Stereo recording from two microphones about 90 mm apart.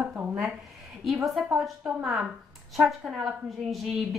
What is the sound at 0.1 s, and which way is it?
Speech, 20° right (ahead or behind).